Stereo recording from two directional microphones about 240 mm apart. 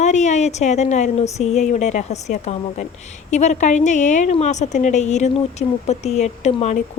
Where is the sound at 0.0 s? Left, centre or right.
Left.